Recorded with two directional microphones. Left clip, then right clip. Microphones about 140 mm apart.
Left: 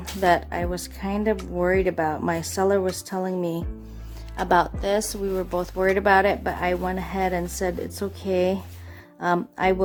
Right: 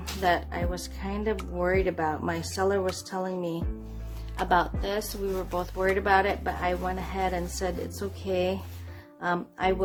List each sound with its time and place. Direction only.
0.0 s speech: 50° left (ahead or behind)